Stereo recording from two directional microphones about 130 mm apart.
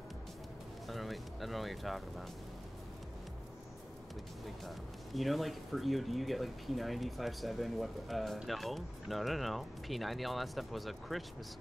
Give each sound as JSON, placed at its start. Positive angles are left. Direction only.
{"t": 0.8, "sound": "speech", "side_deg": 0}
{"t": 4.6, "sound": "speech", "side_deg": 0}